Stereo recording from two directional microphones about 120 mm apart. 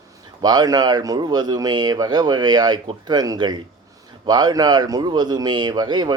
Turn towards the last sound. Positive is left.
turn(degrees=-35)  # may be behind; listen again after turning